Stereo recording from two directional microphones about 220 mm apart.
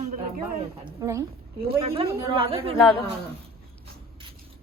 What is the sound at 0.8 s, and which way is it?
Speech, 15° right (ahead or behind).